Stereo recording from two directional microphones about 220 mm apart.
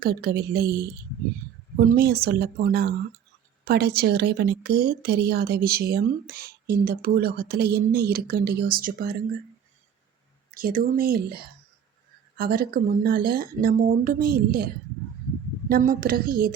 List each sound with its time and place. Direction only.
0.0 s a woman's voice: 45° right (ahead or behind)
10.5 s a woman's voice: 40° right (ahead or behind)
15.7 s speech: 40° right (ahead or behind)